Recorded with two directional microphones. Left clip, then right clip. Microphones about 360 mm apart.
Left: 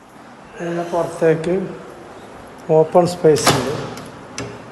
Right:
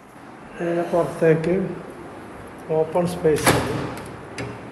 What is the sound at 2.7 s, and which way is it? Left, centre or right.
Speech, centre.